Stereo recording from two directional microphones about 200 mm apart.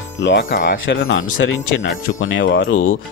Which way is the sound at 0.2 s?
60° left (ahead or behind).